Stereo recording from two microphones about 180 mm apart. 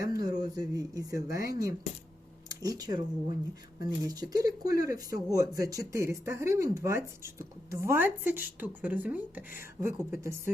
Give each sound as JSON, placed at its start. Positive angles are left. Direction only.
{"t": 0.0, "sound": "speech", "side_deg": -20}